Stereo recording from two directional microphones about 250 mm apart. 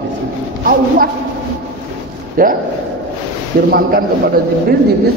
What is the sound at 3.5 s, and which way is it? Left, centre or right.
Speech, right.